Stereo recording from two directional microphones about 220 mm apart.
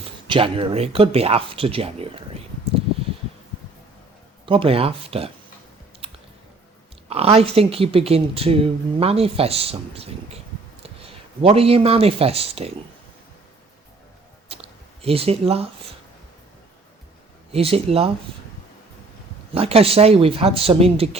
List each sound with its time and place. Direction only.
0.3 s speech: 25° right (ahead or behind)
4.4 s speech: 25° right (ahead or behind)
6.0 s a sound: 25° right (ahead or behind)
7.1 s speech: 25° right (ahead or behind)
11.4 s speech: 25° right (ahead or behind)
14.4 s a sound: 25° right (ahead or behind)
17.5 s speech: 25° right (ahead or behind)
19.5 s speech: 25° right (ahead or behind)